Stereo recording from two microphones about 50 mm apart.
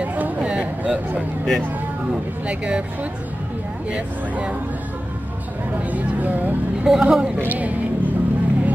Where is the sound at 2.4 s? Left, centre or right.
Right.